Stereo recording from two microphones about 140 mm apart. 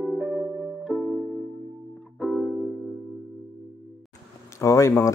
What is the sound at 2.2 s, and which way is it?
Music, centre (ahead or behind).